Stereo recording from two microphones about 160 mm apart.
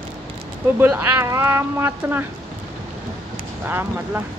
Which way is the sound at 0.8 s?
10° right (ahead or behind).